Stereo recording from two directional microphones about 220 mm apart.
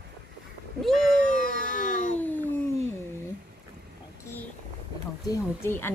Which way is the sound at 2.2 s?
10° left (ahead or behind).